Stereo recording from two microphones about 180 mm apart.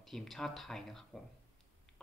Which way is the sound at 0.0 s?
Centre (ahead or behind).